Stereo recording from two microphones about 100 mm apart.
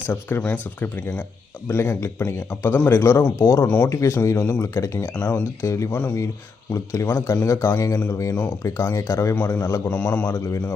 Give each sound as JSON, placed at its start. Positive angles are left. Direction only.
{"t": 0.1, "sound": "a man's voice", "side_deg": 20}
{"t": 4.6, "sound": "a man's voice", "side_deg": 30}